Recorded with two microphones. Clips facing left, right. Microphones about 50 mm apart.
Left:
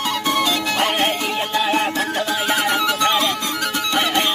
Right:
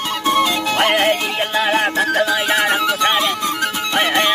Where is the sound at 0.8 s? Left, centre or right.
Right.